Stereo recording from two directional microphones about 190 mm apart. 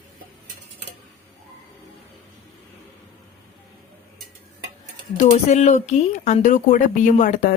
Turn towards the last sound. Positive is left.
turn(degrees=40)  # may be behind; listen again after turning